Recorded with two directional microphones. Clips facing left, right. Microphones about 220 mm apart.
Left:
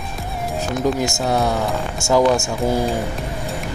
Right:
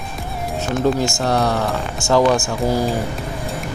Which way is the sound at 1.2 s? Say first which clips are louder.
Even; centre (ahead or behind).